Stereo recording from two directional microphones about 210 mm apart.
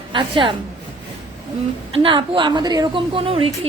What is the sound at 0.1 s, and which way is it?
Speech, 25° right (ahead or behind).